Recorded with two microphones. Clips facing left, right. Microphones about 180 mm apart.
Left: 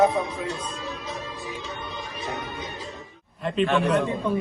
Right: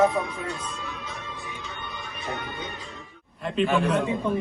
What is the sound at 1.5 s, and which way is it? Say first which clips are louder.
Music: left 4 dB; 35° left (ahead or behind).